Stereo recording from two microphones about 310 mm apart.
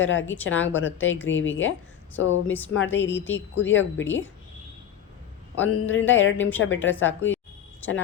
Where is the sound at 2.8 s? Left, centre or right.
Centre.